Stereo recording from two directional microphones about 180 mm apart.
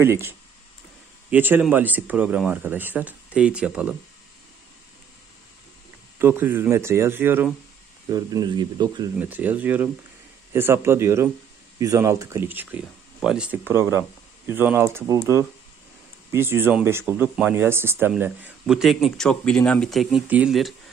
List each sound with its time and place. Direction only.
0.0 s speech: 15° right (ahead or behind)
6.1 s speech: 10° right (ahead or behind)
9.2 s speech: 10° right (ahead or behind)